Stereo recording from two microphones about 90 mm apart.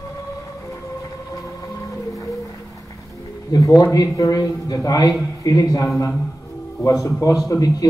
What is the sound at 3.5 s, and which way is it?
A man's voice, 40° left (ahead or behind).